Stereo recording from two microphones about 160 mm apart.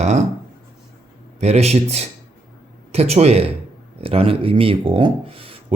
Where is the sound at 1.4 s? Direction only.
40° right (ahead or behind).